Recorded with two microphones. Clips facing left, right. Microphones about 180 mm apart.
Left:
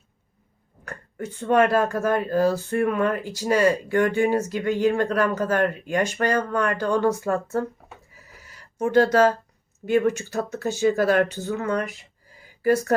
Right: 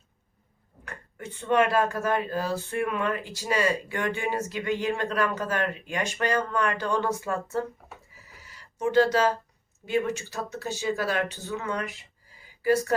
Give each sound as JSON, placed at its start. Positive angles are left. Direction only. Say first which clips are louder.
{"t": 0.9, "sound": "speech", "louder": "left 7 dB", "side_deg": 40}
{"t": 8.4, "sound": "a sound", "louder": "left 3 dB", "side_deg": 50}
{"t": 9.8, "sound": "speech", "louder": "left 6 dB", "side_deg": 50}